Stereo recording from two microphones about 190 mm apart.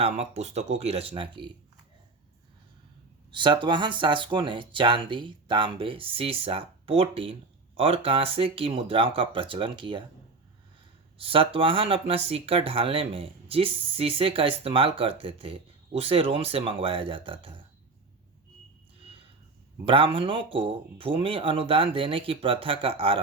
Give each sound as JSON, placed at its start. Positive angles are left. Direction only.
{"t": 0.0, "sound": "speech", "side_deg": -35}
{"t": 3.3, "sound": "speech", "side_deg": -25}
{"t": 11.2, "sound": "speech", "side_deg": -30}
{"t": 18.9, "sound": "a sound", "side_deg": -30}
{"t": 19.8, "sound": "speech", "side_deg": -30}